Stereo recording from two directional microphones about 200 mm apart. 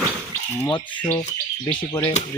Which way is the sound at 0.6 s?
25° left (ahead or behind).